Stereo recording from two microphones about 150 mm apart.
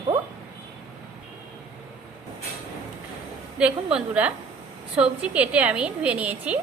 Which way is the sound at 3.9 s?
10° right (ahead or behind).